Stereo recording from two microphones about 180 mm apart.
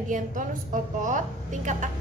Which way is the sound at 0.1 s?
45° right (ahead or behind).